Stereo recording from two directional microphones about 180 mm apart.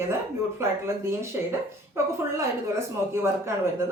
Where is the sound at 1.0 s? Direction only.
15° right (ahead or behind).